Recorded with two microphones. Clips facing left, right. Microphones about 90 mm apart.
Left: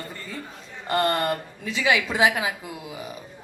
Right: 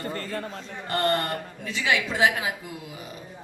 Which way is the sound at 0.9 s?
25° left (ahead or behind).